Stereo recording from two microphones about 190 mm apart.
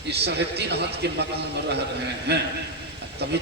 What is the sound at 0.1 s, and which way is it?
A man's voice, 60° right (ahead or behind).